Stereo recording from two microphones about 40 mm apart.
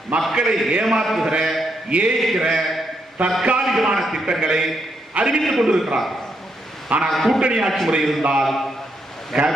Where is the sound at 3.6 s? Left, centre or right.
Centre.